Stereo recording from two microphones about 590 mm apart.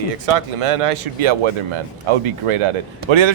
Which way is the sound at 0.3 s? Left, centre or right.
Right.